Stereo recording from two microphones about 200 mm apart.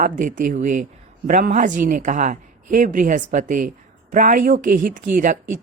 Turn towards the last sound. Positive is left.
turn(degrees=-45)  # may be behind; listen again after turning